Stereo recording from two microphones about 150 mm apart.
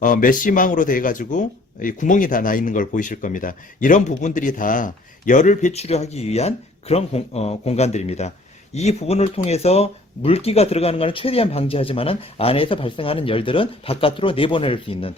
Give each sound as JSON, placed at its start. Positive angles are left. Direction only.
{"t": 0.0, "sound": "speech", "side_deg": 65}